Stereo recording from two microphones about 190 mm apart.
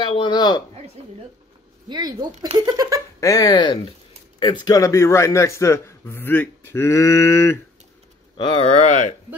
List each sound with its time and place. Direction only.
0.0 s speech: 25° left (ahead or behind)
1.0 s speech: 30° right (ahead or behind)
3.2 s a man's voice: 15° left (ahead or behind)
8.4 s speech: 30° left (ahead or behind)